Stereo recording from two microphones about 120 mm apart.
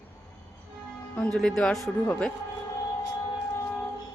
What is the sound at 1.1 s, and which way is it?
Speech, 10° left (ahead or behind).